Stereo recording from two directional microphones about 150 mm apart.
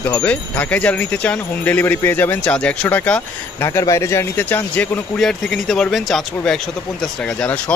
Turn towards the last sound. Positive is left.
turn(degrees=5)  # may be behind; listen again after turning